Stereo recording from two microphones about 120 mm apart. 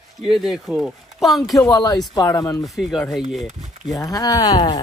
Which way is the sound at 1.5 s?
30° left (ahead or behind).